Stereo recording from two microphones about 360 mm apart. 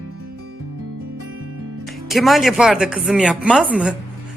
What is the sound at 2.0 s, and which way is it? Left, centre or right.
Speech, centre.